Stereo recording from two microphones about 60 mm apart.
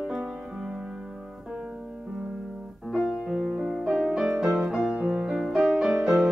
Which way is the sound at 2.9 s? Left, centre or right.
Centre.